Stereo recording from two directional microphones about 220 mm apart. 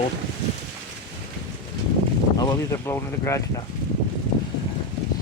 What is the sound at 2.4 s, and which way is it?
Speech, 15° left (ahead or behind).